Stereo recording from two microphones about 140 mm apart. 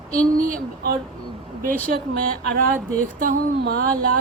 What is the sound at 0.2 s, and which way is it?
Speech, 80° right.